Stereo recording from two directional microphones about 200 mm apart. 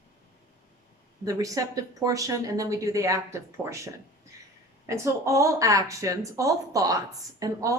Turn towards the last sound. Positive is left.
turn(degrees=-15)  # may be behind; listen again after turning